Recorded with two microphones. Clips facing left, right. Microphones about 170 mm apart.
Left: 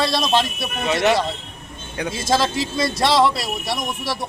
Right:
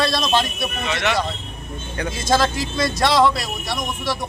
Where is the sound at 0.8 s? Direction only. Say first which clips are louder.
Left 6 dB; 35° left (ahead or behind).